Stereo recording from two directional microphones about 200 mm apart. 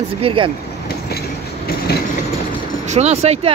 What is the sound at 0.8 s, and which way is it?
Train, 50° left (ahead or behind).